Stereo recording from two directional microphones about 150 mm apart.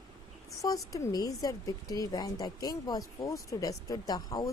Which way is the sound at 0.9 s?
25° left (ahead or behind).